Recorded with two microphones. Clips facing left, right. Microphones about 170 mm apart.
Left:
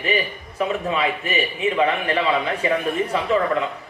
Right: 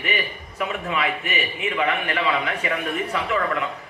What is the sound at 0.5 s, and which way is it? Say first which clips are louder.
A man's voice: left 4 dB; 30° left (ahead or behind).